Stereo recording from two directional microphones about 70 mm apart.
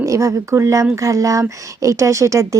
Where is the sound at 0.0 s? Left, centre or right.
Right.